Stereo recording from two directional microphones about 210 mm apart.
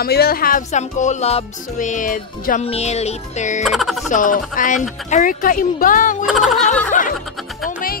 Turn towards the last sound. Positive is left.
turn(degrees=40)  # may be behind; listen again after turning